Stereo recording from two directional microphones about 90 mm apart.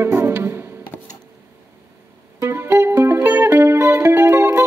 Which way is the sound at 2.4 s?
30° right (ahead or behind).